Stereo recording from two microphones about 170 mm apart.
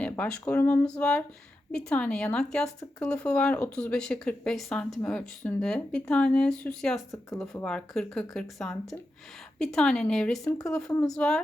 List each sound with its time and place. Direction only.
0.0 s speech: 5° left (ahead or behind)